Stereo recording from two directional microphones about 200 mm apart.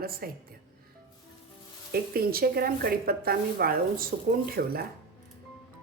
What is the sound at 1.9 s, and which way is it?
Speech, 50° right (ahead or behind).